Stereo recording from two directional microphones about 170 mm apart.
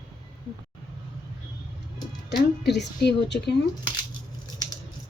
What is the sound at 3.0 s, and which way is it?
Speech, 75° left (ahead or behind).